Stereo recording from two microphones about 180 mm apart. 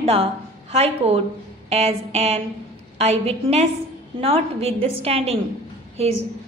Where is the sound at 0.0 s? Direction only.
35° right (ahead or behind).